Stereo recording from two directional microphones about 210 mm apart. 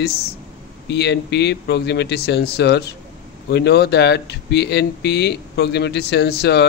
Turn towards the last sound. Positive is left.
turn(degrees=50)  # may be behind; listen again after turning